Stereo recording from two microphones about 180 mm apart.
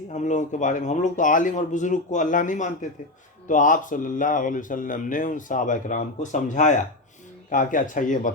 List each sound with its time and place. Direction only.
0.1 s speech: 40° left (ahead or behind)